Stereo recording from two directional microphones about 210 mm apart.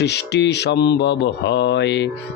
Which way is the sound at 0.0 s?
55° left (ahead or behind).